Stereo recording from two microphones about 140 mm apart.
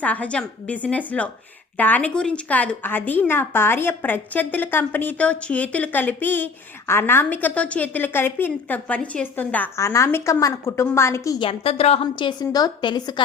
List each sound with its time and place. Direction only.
0.0 s a woman's voice: 10° left (ahead or behind)
11.3 s a woman's voice: 40° left (ahead or behind)